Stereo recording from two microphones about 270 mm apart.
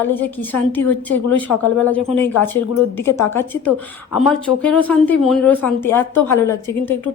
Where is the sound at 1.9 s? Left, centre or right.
Centre.